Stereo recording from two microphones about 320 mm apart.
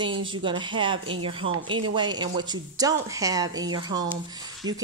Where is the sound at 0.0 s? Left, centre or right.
Centre.